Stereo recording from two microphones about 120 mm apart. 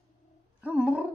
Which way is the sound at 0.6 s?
10° right (ahead or behind).